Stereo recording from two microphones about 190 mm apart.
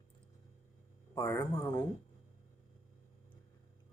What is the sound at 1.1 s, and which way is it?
Speech, 15° left (ahead or behind).